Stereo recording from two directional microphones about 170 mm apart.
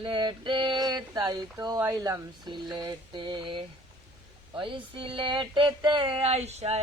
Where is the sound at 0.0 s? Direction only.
30° right (ahead or behind).